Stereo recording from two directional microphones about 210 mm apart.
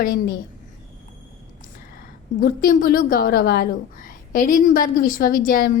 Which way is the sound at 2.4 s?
45° left (ahead or behind).